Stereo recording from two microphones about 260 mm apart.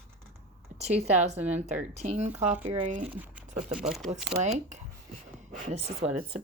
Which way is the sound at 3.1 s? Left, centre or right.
Centre.